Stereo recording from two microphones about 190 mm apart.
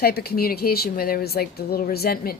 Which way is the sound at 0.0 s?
55° left (ahead or behind).